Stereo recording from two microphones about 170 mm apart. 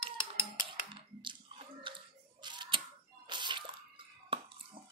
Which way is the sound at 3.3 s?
25° right (ahead or behind).